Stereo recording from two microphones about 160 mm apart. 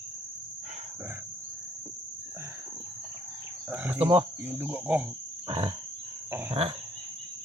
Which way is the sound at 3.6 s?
10° right (ahead or behind).